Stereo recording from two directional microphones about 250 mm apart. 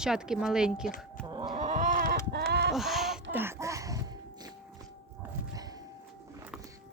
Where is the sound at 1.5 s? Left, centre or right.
Right.